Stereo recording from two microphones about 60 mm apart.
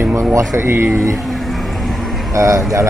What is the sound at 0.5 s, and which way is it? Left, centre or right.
Speech, right.